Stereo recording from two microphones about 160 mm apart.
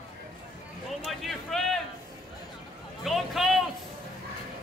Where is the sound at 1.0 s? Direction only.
Centre (ahead or behind).